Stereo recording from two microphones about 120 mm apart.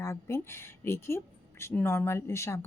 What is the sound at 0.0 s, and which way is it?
A woman's voice, 25° left (ahead or behind).